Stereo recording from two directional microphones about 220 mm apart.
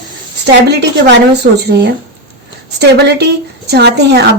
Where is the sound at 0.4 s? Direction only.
50° right (ahead or behind).